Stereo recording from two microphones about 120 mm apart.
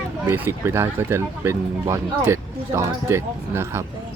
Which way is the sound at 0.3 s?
20° right (ahead or behind).